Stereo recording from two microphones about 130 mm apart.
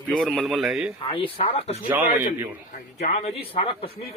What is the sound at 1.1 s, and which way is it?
Speech, 45° left (ahead or behind).